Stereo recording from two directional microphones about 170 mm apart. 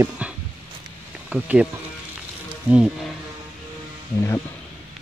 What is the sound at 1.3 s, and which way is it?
Speech, 5° right (ahead or behind).